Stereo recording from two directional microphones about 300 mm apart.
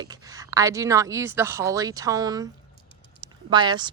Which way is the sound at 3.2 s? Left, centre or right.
Centre.